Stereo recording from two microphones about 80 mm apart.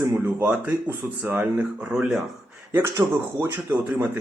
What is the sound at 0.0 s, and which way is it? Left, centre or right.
Speech, right.